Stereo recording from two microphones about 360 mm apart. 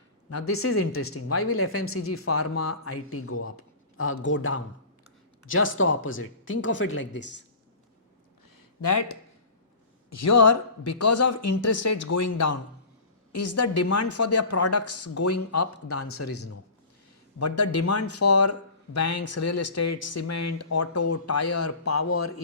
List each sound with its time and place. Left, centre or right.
0.3 s speech: left
8.8 s speech: left